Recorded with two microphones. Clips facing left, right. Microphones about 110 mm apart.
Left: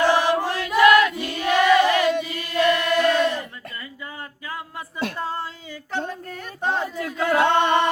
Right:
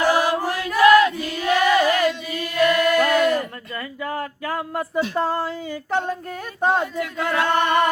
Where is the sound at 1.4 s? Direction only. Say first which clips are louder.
Left 1 dB; 25° left (ahead or behind).